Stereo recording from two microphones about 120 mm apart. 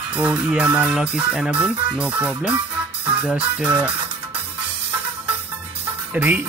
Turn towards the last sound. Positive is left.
turn(degrees=-15)  # may be behind; listen again after turning